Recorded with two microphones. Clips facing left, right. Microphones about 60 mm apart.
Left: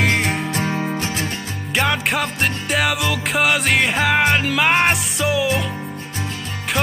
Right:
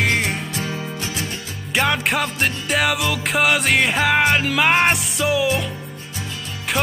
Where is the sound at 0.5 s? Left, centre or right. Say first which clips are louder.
Left 5 dB; left.